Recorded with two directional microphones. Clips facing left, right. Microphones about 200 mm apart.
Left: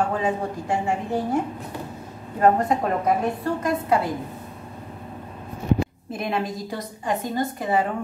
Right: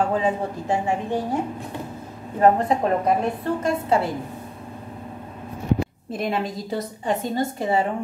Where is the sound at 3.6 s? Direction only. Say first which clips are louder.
Right 1 dB; 25° right (ahead or behind).